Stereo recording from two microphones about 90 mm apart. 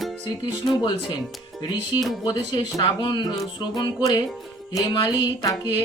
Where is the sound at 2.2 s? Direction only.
60° left (ahead or behind).